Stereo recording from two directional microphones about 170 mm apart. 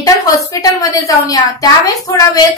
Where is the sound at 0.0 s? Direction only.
20° left (ahead or behind).